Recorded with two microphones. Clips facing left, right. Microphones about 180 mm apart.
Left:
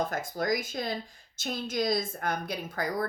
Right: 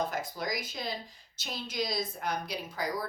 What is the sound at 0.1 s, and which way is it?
A woman's voice, 50° left (ahead or behind).